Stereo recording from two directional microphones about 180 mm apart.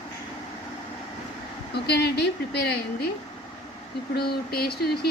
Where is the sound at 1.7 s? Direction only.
65° left (ahead or behind).